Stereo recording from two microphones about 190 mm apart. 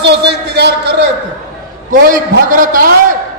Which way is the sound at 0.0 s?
60° right (ahead or behind).